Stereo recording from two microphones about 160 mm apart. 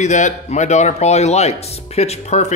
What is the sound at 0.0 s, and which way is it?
Speech, 50° left (ahead or behind).